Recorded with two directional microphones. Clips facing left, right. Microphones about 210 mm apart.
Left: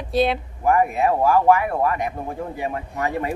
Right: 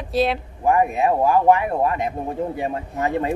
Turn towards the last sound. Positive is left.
turn(degrees=-25)  # may be behind; listen again after turning